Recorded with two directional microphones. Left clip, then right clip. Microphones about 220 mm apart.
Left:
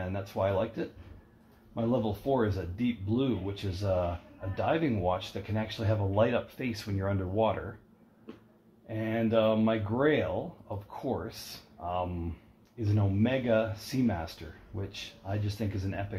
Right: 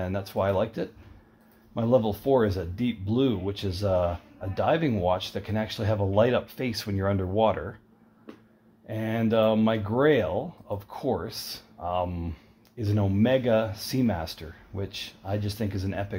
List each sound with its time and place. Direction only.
0.0 s speech: 50° right (ahead or behind)
8.8 s speech: 50° right (ahead or behind)